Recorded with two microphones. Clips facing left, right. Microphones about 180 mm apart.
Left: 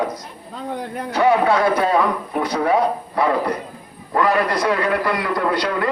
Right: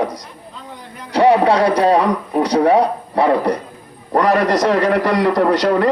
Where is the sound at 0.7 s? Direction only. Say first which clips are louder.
Left 12 dB; 55° left (ahead or behind).